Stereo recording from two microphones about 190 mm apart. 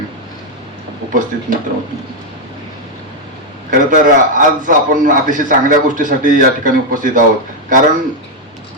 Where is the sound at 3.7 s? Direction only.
45° right (ahead or behind).